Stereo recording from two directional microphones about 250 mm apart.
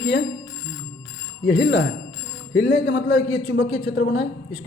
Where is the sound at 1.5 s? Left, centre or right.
Left.